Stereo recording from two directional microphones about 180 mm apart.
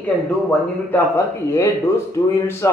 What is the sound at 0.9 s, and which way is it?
A woman's voice, 15° left (ahead or behind).